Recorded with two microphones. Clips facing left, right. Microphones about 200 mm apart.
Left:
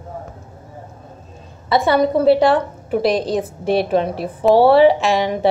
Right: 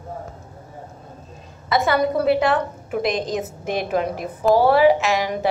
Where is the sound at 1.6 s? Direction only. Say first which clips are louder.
Left 4 dB; 30° left (ahead or behind).